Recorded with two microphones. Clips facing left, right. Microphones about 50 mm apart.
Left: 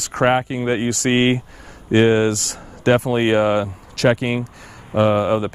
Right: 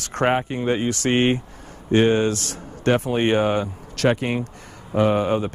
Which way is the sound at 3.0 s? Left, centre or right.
Left.